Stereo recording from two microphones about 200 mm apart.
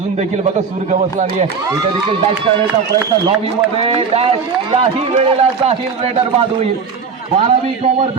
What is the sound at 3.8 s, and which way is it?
A man's voice, 30° right (ahead or behind).